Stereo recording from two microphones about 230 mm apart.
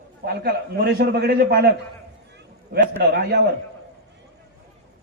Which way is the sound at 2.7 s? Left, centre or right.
Right.